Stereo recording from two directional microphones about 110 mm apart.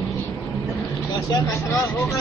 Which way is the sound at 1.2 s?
30° left (ahead or behind).